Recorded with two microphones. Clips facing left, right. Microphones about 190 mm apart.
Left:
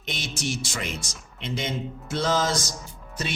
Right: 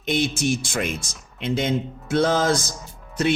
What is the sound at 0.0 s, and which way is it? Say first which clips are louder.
Speech: right 10 dB; 55° right (ahead or behind).